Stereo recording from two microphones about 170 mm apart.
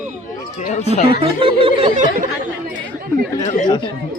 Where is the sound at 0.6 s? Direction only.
45° left (ahead or behind).